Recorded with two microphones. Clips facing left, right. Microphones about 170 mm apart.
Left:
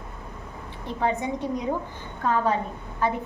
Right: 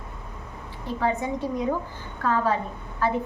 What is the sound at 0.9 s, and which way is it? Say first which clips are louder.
A woman's voice: even; 20° left (ahead or behind).